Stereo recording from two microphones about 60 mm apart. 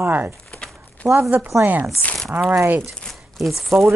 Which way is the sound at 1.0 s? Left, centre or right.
Right.